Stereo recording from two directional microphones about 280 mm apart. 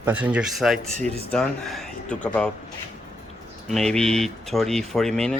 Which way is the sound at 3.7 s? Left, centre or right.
Centre.